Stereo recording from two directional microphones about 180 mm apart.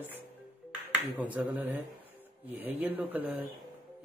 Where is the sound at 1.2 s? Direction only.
10° right (ahead or behind).